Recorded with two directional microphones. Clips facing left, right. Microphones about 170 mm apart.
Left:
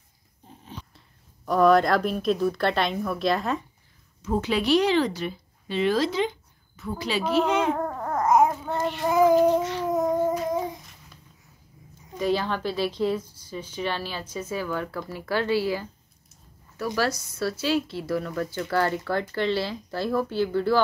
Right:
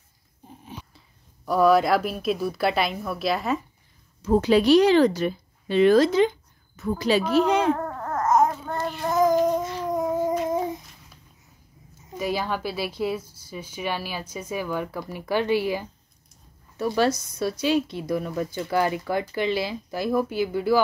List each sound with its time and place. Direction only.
0.7 s speech: 5° right (ahead or behind)
4.2 s a woman's voice: 40° right (ahead or behind)
7.7 s babbling: 10° left (ahead or behind)
9.0 s child singing: 10° left (ahead or behind)
9.7 s babbling: centre (ahead or behind)
12.2 s speech: 10° right (ahead or behind)